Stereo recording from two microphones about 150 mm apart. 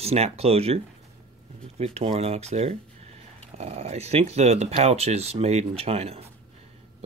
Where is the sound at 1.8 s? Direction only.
45° right (ahead or behind).